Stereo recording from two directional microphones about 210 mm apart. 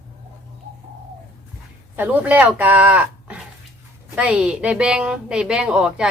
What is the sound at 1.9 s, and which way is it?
A woman's voice, 10° right (ahead or behind).